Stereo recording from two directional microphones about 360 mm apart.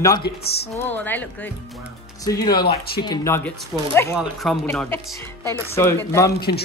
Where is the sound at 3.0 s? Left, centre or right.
Centre.